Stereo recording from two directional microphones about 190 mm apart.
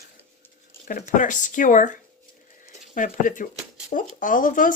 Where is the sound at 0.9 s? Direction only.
40° left (ahead or behind).